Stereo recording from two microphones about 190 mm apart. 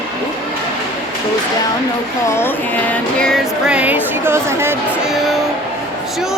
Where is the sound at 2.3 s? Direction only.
10° left (ahead or behind); by 4.8 s 15° right (ahead or behind).